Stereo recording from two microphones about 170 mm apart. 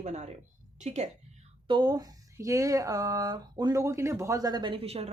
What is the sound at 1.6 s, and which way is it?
Speech, 25° right (ahead or behind).